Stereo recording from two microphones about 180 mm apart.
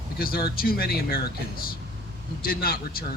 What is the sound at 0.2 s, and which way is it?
Speech, 55° left (ahead or behind).